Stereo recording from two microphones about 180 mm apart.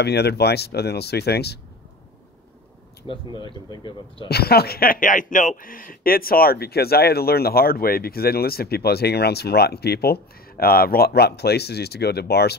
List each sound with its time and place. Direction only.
0.0 s speech: 65° left (ahead or behind)
3.3 s speech: 25° left (ahead or behind)
4.3 s speech: 60° left (ahead or behind)